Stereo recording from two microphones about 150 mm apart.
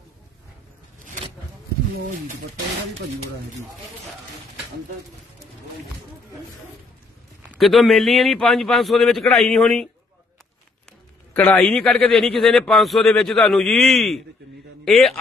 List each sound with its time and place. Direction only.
0.9 s a sound: 60° right (ahead or behind)
7.5 s a man's voice: centre (ahead or behind)
11.3 s a man's voice: 10° left (ahead or behind)